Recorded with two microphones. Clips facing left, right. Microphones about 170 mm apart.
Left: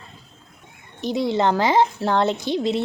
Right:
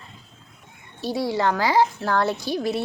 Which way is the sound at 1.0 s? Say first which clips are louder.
Left 3 dB; 20° left (ahead or behind).